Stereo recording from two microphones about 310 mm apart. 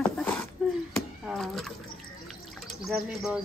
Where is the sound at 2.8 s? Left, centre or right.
Centre.